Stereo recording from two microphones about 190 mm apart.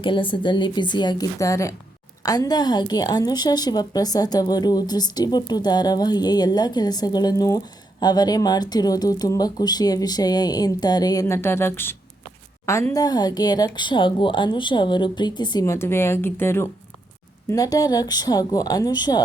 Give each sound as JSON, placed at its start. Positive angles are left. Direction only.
{"t": 0.0, "sound": "a woman's voice", "side_deg": 25}